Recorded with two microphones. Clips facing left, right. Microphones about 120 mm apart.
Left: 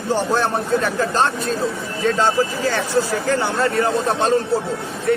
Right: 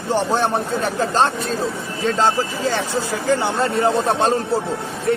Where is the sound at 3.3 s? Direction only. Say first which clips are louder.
Right 1 dB; 20° right (ahead or behind).